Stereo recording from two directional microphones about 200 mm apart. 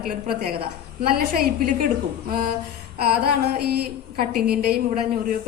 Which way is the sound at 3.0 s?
50° right (ahead or behind).